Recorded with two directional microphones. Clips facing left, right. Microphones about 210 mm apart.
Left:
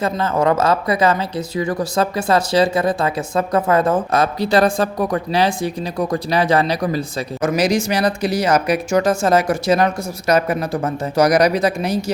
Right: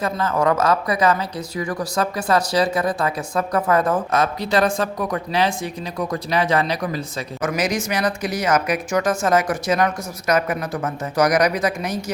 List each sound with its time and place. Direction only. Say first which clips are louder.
0.0 s speech: left 2 dB; 25° left (ahead or behind)